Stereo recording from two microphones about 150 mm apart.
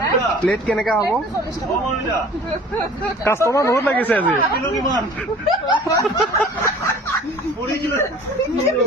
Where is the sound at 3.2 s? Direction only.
20° left (ahead or behind).